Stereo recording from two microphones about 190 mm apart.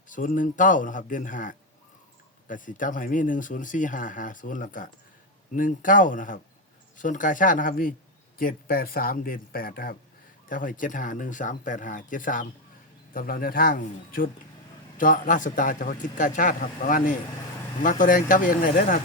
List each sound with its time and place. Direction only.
0.1 s speech: 45° left (ahead or behind)